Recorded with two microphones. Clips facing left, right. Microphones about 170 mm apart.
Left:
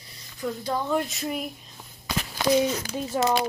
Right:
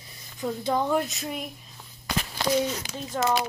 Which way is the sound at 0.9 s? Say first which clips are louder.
Even; centre (ahead or behind).